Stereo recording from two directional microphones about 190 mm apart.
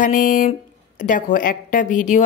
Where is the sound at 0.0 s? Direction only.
45° left (ahead or behind).